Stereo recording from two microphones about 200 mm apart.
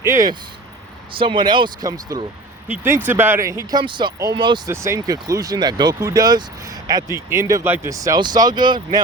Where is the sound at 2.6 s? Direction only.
10° right (ahead or behind).